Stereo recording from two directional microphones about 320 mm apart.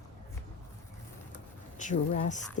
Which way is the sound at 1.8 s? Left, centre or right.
Left.